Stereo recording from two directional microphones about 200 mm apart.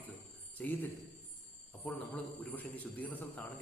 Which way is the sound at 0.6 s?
5° left (ahead or behind).